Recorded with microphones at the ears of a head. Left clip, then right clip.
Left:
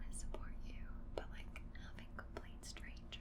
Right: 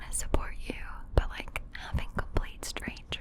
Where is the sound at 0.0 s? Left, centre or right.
Right.